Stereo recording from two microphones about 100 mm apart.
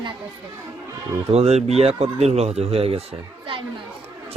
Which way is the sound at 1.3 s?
90° right.